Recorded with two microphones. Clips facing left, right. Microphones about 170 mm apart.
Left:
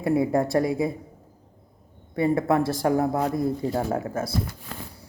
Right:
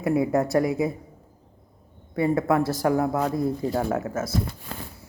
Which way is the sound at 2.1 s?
30° left (ahead or behind).